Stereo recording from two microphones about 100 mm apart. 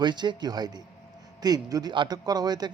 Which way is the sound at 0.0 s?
50° right (ahead or behind).